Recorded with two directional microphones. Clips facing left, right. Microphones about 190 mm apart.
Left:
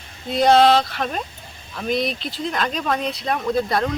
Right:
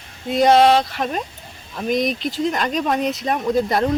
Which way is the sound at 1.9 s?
45° right (ahead or behind).